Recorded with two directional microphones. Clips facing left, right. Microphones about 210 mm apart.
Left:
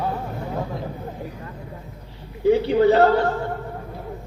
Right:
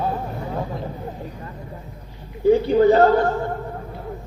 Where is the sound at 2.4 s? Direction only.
45° right (ahead or behind).